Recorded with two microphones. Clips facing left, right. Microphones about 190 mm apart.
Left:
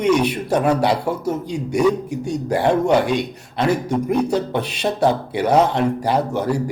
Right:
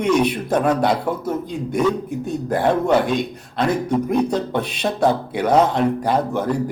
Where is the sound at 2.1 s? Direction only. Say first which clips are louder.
Left 1 dB; 85° left.